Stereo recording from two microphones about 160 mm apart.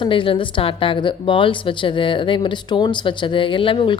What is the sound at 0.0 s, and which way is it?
Speech, 30° left (ahead or behind).